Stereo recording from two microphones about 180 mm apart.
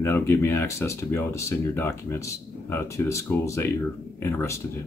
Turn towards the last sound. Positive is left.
turn(degrees=15)  # may be behind; listen again after turning